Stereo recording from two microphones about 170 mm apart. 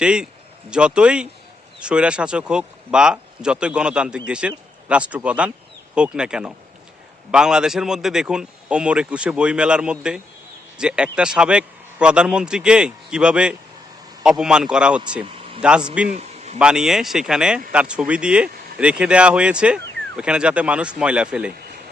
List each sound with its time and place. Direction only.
0.0 s a man's voice: 5° right (ahead or behind)
15.2 s vehicle: 35° right (ahead or behind)
15.6 s a man's voice: 5° right (ahead or behind)
16.0 s a sound: 40° right (ahead or behind)
16.6 s a man's voice: 5° right (ahead or behind)